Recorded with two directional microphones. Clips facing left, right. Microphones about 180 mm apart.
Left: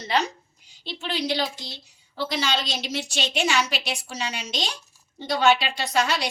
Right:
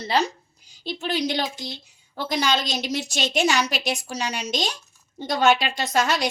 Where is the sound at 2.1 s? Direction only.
45° right (ahead or behind).